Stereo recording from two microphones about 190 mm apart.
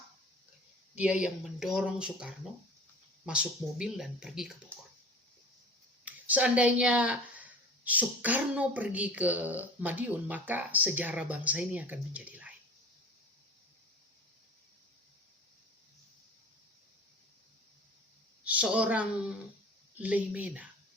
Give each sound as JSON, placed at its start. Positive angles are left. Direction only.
{"t": 0.9, "sound": "speech", "side_deg": -5}
{"t": 6.1, "sound": "speech", "side_deg": -10}
{"t": 18.4, "sound": "speech", "side_deg": -5}